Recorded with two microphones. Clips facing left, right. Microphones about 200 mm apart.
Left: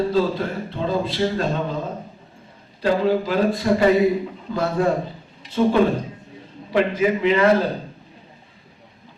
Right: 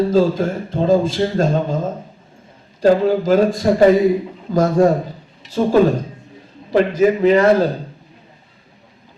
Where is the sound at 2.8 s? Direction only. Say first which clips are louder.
Right 5 dB; 45° right (ahead or behind).